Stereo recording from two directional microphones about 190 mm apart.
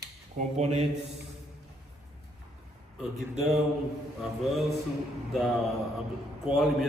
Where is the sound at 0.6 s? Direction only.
35° right (ahead or behind).